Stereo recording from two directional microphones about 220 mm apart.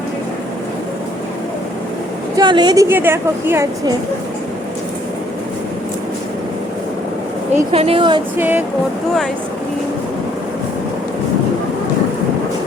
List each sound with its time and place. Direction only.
2.3 s a woman's voice: 20° right (ahead or behind)
7.7 s a woman's voice: 25° right (ahead or behind)
8.4 s a woman's voice: 10° right (ahead or behind)